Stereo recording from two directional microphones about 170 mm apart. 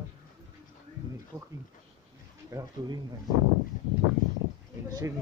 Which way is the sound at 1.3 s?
15° right (ahead or behind).